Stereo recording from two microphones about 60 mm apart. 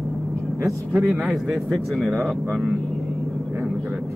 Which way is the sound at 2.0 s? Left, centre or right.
Centre.